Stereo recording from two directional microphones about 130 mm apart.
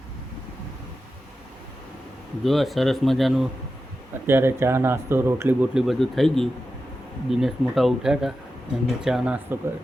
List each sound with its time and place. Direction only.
2.4 s speech: centre (ahead or behind)
4.3 s speech: 20° right (ahead or behind)
5.7 s speech: centre (ahead or behind)